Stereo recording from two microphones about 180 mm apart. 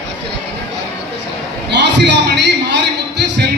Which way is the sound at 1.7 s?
75° right (ahead or behind).